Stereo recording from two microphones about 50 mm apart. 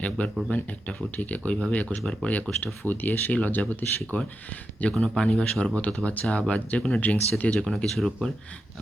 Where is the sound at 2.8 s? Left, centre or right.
Left.